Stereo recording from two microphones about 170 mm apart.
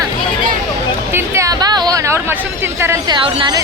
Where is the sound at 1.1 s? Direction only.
15° right (ahead or behind).